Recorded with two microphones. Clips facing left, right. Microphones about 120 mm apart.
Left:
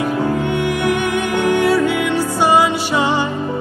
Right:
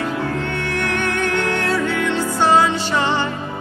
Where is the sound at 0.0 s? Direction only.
15° left (ahead or behind).